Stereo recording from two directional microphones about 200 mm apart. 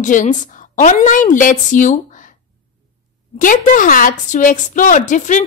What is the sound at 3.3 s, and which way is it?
A woman's voice, 40° left (ahead or behind).